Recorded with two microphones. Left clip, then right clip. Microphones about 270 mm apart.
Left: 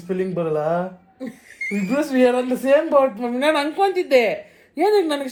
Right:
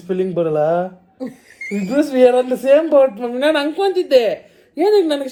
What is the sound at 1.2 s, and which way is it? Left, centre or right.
Rodents, right.